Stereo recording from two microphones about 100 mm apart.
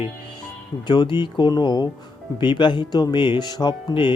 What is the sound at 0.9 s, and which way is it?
Speech, 50° left (ahead or behind).